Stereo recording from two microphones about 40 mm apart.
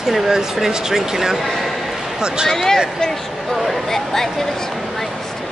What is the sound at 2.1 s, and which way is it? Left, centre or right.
Speech, right.